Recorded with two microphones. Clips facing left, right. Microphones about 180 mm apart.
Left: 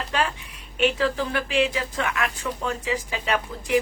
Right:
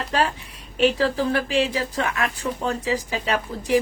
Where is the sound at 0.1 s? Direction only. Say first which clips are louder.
Right 3 dB; 35° right (ahead or behind).